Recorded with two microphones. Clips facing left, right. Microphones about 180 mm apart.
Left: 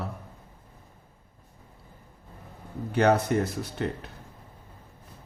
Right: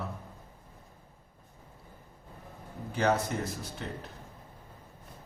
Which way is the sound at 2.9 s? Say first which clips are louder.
Left 6 dB; 65° left (ahead or behind).